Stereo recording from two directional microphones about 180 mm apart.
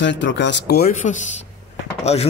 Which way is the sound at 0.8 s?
40° left (ahead or behind).